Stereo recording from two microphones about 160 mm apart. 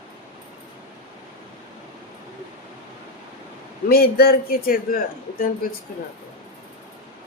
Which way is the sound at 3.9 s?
70° left (ahead or behind).